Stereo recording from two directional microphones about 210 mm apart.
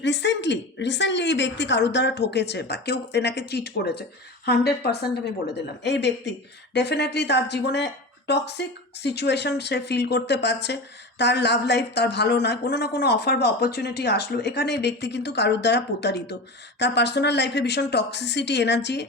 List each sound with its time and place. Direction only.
0.0 s a woman's voice: 55° left (ahead or behind)